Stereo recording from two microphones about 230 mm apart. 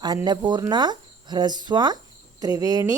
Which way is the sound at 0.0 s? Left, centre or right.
Centre.